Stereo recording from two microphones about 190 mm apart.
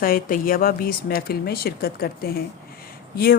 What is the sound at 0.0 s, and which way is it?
A woman's voice, 50° left (ahead or behind).